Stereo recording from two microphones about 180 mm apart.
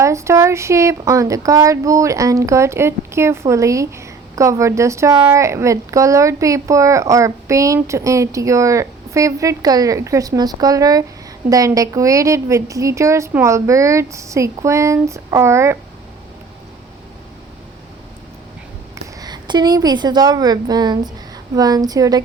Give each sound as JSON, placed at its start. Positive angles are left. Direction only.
{"t": 0.0, "sound": "speech", "side_deg": -15}
{"t": 18.9, "sound": "a woman's voice", "side_deg": -20}